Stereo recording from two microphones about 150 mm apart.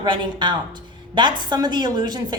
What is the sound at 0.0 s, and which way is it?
A woman's voice, 30° right (ahead or behind).